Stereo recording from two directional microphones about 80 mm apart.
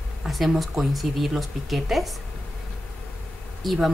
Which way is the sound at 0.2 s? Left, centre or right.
Centre.